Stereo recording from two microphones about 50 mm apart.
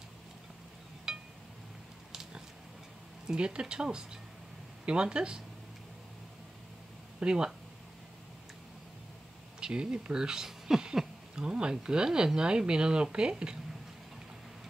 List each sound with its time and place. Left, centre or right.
1.1 s a sound: centre
3.3 s speech: centre
7.2 s speech: centre
9.6 s speech: centre